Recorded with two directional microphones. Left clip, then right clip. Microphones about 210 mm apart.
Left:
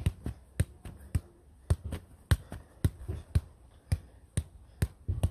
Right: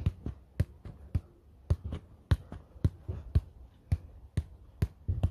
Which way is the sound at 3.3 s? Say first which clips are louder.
Even; 5° left (ahead or behind).